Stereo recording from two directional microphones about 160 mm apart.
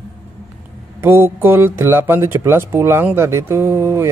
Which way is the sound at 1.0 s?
15° right (ahead or behind).